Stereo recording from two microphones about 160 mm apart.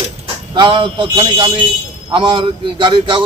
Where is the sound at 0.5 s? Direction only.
30° right (ahead or behind).